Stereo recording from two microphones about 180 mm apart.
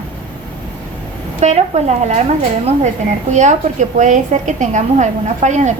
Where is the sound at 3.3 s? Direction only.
40° right (ahead or behind).